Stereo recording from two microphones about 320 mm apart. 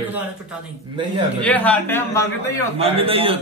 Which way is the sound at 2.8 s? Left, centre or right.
Centre.